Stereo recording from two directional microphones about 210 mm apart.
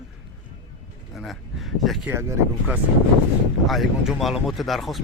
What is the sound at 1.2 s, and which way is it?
Speech, centre (ahead or behind).